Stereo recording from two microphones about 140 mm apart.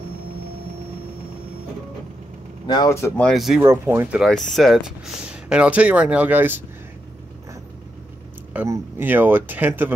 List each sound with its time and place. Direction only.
2.6 s speech: 35° left (ahead or behind)
3.2 s speech: centre (ahead or behind)
3.6 s speech: 15° right (ahead or behind)
4.2 s speech: centre (ahead or behind); by 6.6 s 15° right (ahead or behind)
8.5 s speech: 20° right (ahead or behind)